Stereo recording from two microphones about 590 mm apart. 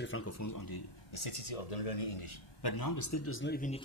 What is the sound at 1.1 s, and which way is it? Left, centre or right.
Speech, left.